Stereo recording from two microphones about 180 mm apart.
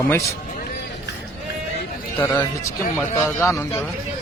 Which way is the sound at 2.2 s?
10° left (ahead or behind).